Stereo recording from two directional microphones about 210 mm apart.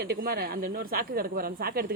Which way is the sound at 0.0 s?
50° right (ahead or behind).